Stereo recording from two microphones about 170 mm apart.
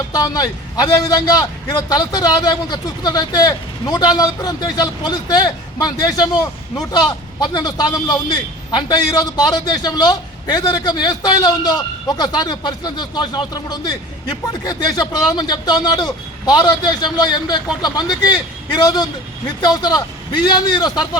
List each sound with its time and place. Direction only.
0.1 s a man's voice: 20° left (ahead or behind)